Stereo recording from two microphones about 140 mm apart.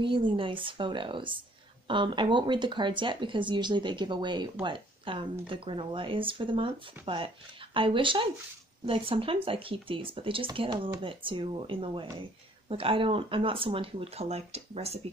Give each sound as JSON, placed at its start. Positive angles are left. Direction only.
{"t": 0.0, "sound": "speech", "side_deg": -35}